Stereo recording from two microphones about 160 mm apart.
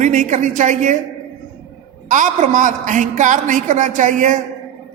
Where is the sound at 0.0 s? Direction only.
50° right (ahead or behind).